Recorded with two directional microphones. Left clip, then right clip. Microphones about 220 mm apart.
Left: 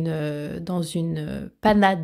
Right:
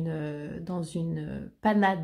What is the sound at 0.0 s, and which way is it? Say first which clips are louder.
Speech: left 7 dB; 40° left (ahead or behind).